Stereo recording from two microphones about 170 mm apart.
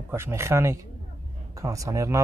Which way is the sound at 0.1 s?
15° right (ahead or behind).